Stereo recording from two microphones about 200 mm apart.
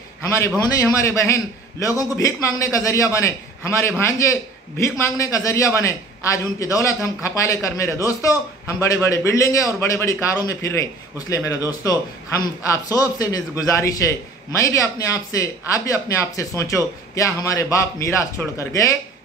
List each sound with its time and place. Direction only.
0.7 s a man's voice: 15° left (ahead or behind)